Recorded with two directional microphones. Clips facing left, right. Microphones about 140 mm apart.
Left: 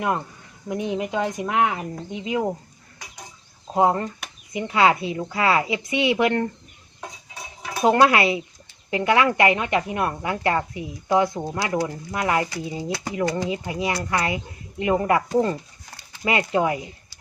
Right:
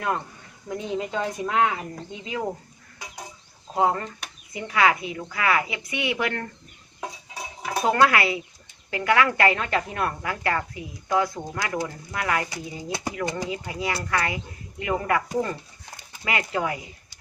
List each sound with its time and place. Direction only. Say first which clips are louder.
0.7 s a woman's voice: left 3 dB; 20° left (ahead or behind)
3.8 s a woman's voice: left 3 dB; 25° left (ahead or behind)
7.9 s a woman's voice: left 4 dB; 20° left (ahead or behind)